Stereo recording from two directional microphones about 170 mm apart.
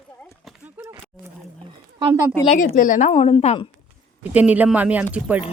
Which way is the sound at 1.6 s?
30° right (ahead or behind).